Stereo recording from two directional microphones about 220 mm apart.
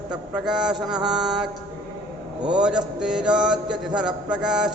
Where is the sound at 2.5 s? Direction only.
5° right (ahead or behind).